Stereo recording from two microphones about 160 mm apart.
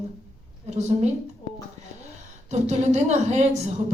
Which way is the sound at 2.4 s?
45° right (ahead or behind).